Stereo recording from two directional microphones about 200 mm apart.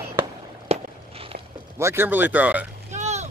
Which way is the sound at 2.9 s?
35° right (ahead or behind).